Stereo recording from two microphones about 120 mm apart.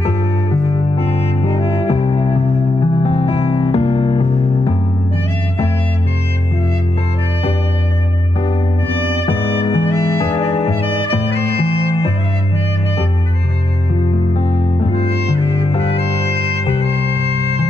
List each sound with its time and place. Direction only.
0.9 s music: 55° left (ahead or behind)
9.0 s music: 55° left (ahead or behind)
14.8 s music: 55° left (ahead or behind)